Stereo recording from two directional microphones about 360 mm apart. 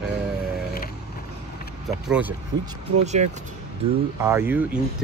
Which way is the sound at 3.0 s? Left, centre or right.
Centre.